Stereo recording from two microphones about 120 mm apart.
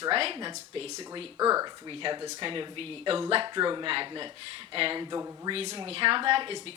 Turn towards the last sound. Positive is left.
turn(degrees=-45)  # may be behind; listen again after turning